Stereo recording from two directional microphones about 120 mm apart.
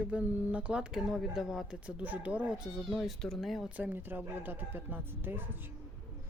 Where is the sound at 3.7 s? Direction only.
15° right (ahead or behind).